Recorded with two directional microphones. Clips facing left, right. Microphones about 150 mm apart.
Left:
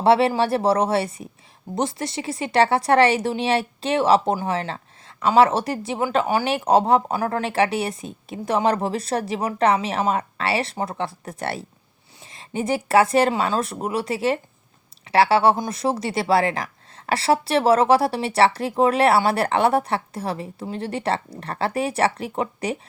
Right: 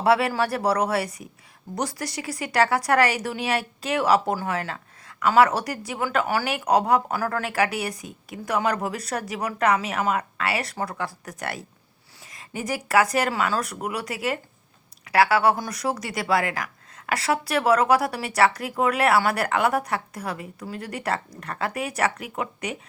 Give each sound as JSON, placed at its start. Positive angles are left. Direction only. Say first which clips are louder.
{"t": 0.0, "sound": "speech", "louder": "left 4 dB", "side_deg": 25}